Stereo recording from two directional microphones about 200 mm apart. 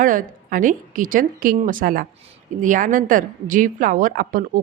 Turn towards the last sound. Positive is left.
turn(degrees=-45)  # may be behind; listen again after turning